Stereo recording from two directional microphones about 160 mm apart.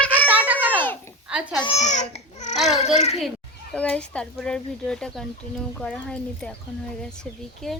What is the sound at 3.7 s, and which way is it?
Speech, 10° left (ahead or behind).